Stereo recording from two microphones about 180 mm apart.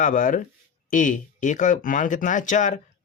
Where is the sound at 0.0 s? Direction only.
45° left (ahead or behind).